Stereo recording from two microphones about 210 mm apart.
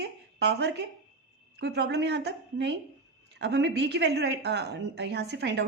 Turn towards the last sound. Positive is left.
turn(degrees=-55)  # may be behind; listen again after turning